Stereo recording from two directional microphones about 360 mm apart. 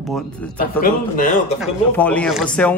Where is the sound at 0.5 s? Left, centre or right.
Left.